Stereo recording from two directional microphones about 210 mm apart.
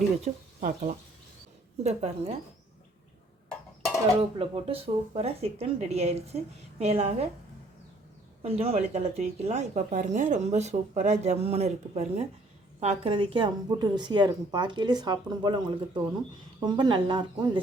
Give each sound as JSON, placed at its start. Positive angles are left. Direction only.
{"t": 0.3, "sound": "speech", "side_deg": -35}
{"t": 4.2, "sound": "speech", "side_deg": -25}
{"t": 8.4, "sound": "speech", "side_deg": -30}